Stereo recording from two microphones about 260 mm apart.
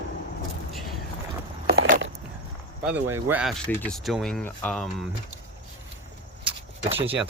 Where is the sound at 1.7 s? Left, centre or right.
Right.